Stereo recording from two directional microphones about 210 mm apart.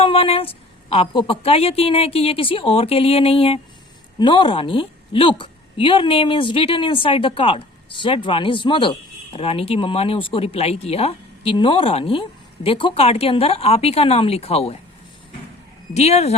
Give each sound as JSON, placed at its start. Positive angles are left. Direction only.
{"t": 0.0, "sound": "a woman's voice", "side_deg": 25}
{"t": 16.0, "sound": "speech", "side_deg": 30}